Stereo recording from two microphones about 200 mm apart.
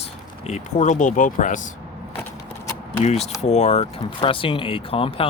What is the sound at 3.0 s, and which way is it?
Speech, 30° left (ahead or behind).